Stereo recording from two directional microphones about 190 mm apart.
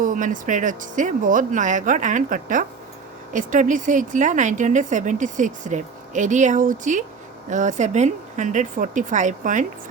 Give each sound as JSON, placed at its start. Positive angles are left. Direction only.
{"t": 0.0, "sound": "a woman's voice", "side_deg": -45}